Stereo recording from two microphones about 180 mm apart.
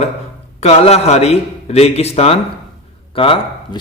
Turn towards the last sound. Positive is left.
turn(degrees=30)  # may be behind; listen again after turning